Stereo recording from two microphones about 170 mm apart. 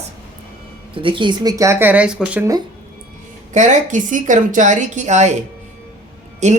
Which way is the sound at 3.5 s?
50° right (ahead or behind).